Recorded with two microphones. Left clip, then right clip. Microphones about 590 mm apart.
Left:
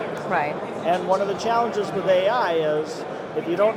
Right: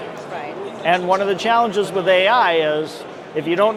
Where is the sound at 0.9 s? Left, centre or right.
Right.